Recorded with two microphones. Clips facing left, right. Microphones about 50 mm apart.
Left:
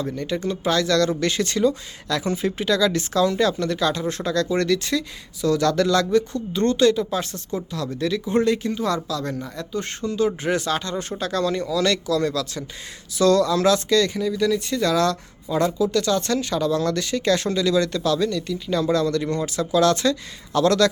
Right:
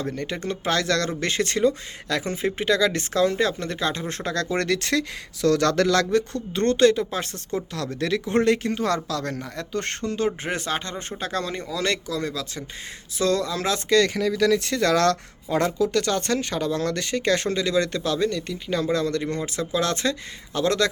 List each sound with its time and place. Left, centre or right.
0.0 s speech: right
14.1 s speech: right